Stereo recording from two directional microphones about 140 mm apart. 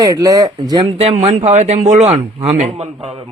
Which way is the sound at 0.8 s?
45° right (ahead or behind).